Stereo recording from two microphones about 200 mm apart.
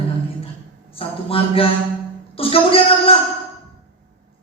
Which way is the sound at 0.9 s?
30° left (ahead or behind).